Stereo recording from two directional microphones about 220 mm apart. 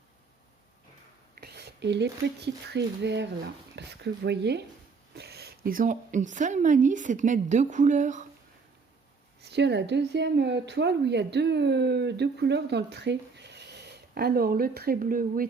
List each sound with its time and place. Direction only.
1.4 s a woman's voice: 50° right (ahead or behind); by 8.3 s 35° right (ahead or behind)
9.4 s a woman's voice: 50° right (ahead or behind)